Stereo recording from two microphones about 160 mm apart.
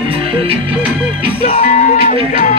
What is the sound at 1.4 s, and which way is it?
Music, 45° left (ahead or behind).